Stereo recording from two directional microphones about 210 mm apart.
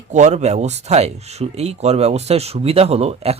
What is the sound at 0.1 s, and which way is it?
Speech, 35° right (ahead or behind).